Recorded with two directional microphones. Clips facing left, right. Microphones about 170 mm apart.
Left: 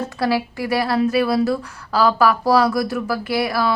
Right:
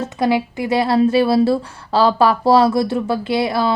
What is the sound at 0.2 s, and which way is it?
Speech, 20° right (ahead or behind).